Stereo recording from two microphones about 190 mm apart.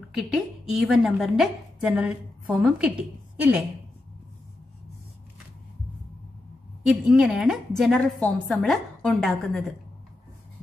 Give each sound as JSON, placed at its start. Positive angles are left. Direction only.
{"t": 0.1, "sound": "a woman's voice", "side_deg": 0}
{"t": 6.9, "sound": "a woman's voice", "side_deg": 0}